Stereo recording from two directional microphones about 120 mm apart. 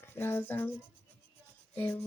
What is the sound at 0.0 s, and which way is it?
Speech, 20° left (ahead or behind).